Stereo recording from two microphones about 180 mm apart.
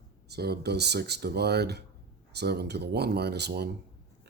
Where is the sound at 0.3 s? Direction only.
65° right (ahead or behind).